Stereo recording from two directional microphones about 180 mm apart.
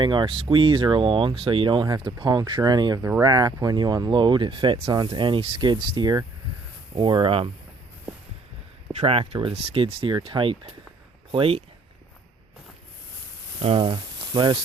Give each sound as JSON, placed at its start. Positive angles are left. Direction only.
{"t": 0.0, "sound": "speech", "side_deg": -25}
{"t": 9.0, "sound": "speech", "side_deg": -30}
{"t": 13.6, "sound": "speech", "side_deg": -30}